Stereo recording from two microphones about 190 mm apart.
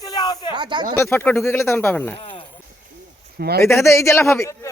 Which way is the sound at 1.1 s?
10° left (ahead or behind).